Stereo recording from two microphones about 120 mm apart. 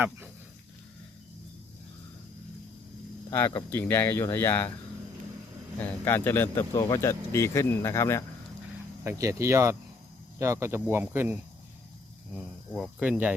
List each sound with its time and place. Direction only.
3.7 s speech: 20° left (ahead or behind)
5.8 s speech: 15° left (ahead or behind)
9.0 s speech: 25° right (ahead or behind)
12.3 s speech: 5° right (ahead or behind)